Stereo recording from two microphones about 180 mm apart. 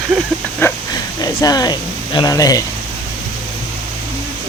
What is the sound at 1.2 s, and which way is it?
Speech, 20° left (ahead or behind).